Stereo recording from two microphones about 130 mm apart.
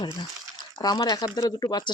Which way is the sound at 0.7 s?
30° left (ahead or behind).